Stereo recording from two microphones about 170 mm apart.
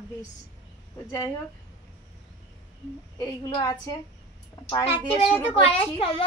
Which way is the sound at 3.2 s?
25° left (ahead or behind).